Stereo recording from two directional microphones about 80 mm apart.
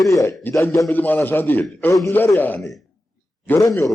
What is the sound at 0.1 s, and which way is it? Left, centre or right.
Speech, left.